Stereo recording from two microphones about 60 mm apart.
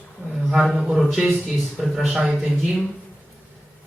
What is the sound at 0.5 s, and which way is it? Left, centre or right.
A man's voice, centre.